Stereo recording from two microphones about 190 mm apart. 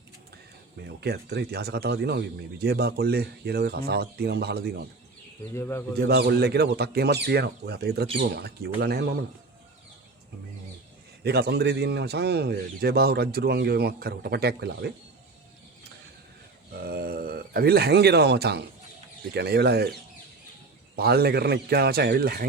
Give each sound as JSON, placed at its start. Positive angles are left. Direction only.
{"t": 0.8, "sound": "speech", "side_deg": -60}
{"t": 5.5, "sound": "speech", "side_deg": 15}
{"t": 6.0, "sound": "speech", "side_deg": -55}
{"t": 11.2, "sound": "speech", "side_deg": -60}
{"t": 16.8, "sound": "a sound", "side_deg": -50}
{"t": 19.3, "sound": "speech", "side_deg": -60}